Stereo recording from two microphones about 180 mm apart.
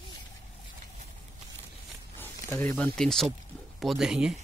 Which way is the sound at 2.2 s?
15° left (ahead or behind).